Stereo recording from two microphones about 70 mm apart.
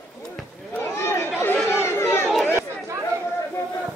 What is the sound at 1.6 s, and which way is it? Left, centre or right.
Chatter, left.